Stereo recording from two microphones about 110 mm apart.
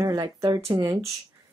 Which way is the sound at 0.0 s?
35° right (ahead or behind).